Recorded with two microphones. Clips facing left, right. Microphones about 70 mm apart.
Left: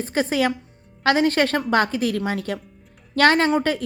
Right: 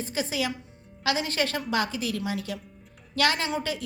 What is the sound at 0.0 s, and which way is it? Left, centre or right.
A woman's voice, left.